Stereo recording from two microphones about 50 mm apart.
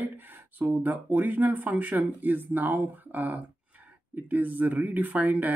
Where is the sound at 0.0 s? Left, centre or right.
Right.